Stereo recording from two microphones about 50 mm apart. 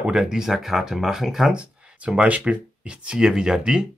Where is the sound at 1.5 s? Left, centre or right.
Right.